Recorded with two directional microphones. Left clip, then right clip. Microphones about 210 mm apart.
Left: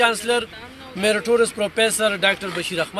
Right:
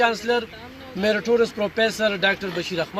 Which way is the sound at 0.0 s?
5° left (ahead or behind).